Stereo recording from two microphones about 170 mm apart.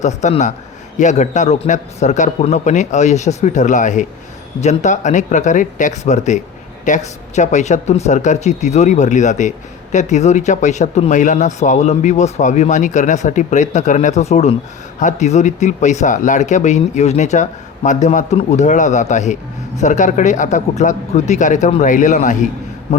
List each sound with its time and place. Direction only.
0.0 s speech: 45° left (ahead or behind)
22.9 s a man's voice: 35° left (ahead or behind)